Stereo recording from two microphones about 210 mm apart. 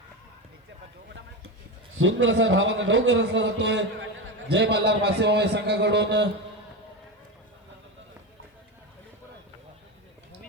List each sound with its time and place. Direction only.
2.0 s a man's voice: 60° right (ahead or behind)